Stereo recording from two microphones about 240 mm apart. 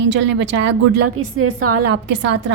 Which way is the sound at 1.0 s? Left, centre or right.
Right.